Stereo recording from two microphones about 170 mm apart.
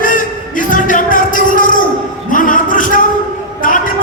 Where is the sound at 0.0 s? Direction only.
50° left (ahead or behind).